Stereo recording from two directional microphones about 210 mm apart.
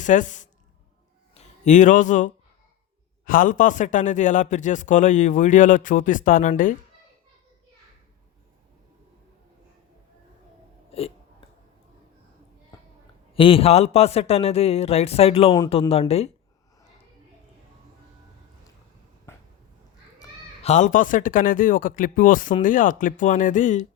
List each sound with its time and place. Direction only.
0.0 s a man's voice: 35° left (ahead or behind)
13.3 s a man's voice: 25° left (ahead or behind)
19.3 s a sound: 10° left (ahead or behind)
20.6 s a man's voice: 35° left (ahead or behind)